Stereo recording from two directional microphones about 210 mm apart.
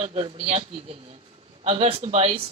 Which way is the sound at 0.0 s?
30° right (ahead or behind).